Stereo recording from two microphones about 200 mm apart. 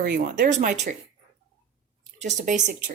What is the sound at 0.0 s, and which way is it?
Speech, 50° right (ahead or behind).